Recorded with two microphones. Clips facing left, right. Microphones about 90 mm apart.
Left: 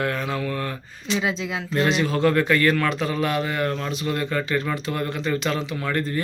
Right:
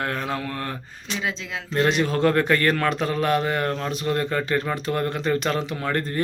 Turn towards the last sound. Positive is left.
turn(degrees=-45)  # may be behind; listen again after turning